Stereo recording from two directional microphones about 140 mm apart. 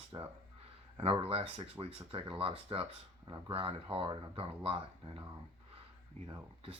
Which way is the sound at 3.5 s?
45° right (ahead or behind).